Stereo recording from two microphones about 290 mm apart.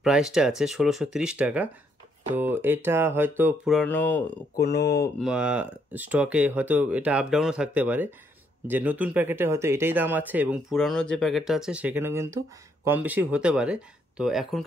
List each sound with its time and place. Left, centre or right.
0.0 s speech: centre
4.6 s speech: left
5.2 s speech: centre